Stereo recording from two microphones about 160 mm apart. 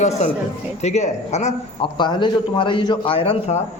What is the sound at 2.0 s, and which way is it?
A man's voice, 30° left (ahead or behind).